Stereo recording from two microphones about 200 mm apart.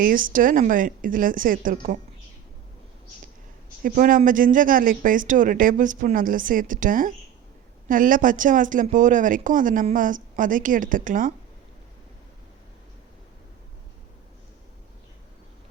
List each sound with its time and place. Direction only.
0.0 s speech: 45° right (ahead or behind)
3.8 s speech: 45° right (ahead or behind)